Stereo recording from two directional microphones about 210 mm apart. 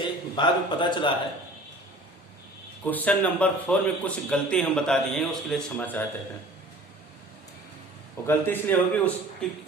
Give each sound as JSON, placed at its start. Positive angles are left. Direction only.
{"t": 0.3, "sound": "a man's voice", "side_deg": 20}
{"t": 2.8, "sound": "a man's voice", "side_deg": 10}
{"t": 8.3, "sound": "a man's voice", "side_deg": 10}